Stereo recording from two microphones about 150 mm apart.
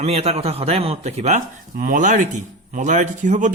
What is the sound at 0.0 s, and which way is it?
Speech, 45° right (ahead or behind).